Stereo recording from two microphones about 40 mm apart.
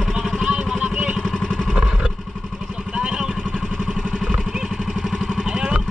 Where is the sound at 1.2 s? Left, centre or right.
Centre.